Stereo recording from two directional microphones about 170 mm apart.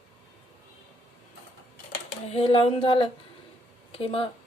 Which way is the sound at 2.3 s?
35° left (ahead or behind).